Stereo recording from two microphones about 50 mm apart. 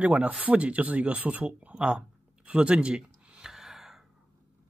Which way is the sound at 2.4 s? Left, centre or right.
Right.